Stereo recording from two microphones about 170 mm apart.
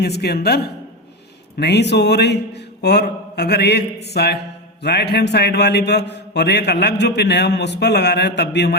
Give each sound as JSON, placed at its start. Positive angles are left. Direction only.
{"t": 0.0, "sound": "a man's voice", "side_deg": 70}